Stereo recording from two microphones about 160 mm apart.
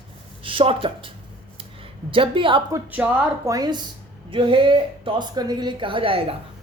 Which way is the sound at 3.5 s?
25° right (ahead or behind).